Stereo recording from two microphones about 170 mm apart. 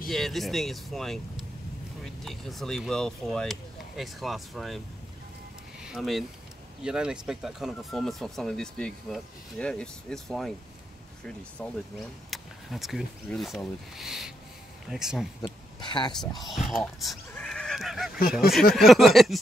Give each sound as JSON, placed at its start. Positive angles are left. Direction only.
{"t": 0.1, "sound": "speech", "side_deg": 0}
{"t": 5.8, "sound": "a sound", "side_deg": 0}
{"t": 6.8, "sound": "speech", "side_deg": -5}
{"t": 12.3, "sound": "speech", "side_deg": 0}
{"t": 15.4, "sound": "speech", "side_deg": 25}
{"t": 16.4, "sound": "speech", "side_deg": 0}
{"t": 17.3, "sound": "honk", "side_deg": 5}
{"t": 18.5, "sound": "speech", "side_deg": 0}